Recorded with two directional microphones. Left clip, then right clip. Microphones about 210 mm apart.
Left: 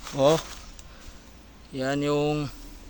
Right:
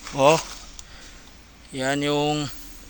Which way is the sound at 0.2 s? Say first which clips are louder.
Right 4 dB; centre (ahead or behind).